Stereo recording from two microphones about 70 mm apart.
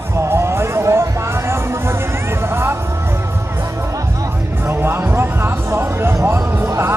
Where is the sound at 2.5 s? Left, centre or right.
Right.